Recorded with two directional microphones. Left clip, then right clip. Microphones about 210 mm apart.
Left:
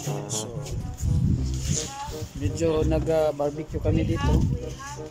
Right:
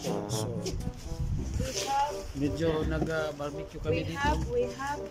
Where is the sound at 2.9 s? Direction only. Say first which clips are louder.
Left 9 dB; 20° left (ahead or behind).